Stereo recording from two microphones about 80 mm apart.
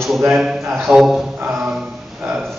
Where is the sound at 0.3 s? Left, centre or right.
Centre.